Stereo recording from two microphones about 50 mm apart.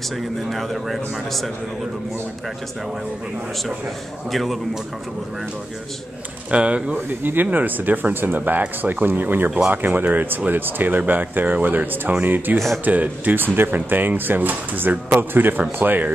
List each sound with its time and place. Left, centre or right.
0.5 s a man's voice: centre
4.3 s a man's voice: centre
6.5 s speech: right
7.5 s speech: right
12.5 s a man's voice: centre
12.8 s speech: right